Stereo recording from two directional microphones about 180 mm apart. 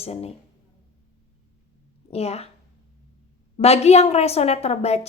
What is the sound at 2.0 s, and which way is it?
Speech, 35° left (ahead or behind).